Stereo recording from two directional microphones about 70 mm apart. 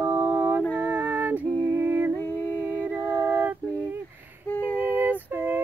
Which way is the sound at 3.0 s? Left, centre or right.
Right.